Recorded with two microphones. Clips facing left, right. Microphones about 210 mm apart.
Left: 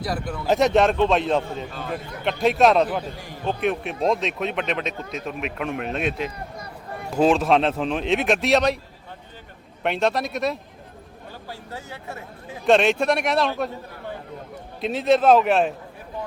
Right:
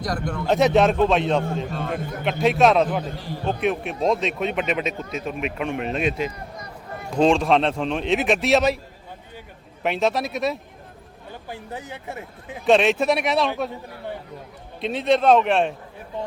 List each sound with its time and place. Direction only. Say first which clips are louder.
0.0 s speech: right 1 dB; 5° left (ahead or behind)
3.4 s speech: even; centre (ahead or behind)
9.8 s speech: even; centre (ahead or behind)
11.4 s speech: right 3 dB; 20° right (ahead or behind)
12.6 s speech: even; centre (ahead or behind)
14.8 s speech: left 1 dB; centre (ahead or behind)